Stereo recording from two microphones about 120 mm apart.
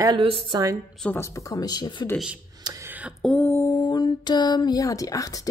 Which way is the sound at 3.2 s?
5° left (ahead or behind).